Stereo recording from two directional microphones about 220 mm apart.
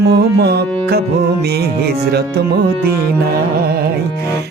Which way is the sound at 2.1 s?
45° right (ahead or behind).